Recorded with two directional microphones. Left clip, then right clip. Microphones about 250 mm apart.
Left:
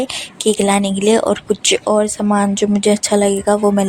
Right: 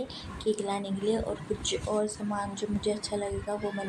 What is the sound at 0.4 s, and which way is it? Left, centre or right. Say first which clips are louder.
Speech: left 15 dB; left.